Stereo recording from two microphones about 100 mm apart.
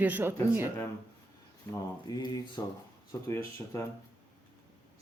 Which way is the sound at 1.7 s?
30° left (ahead or behind).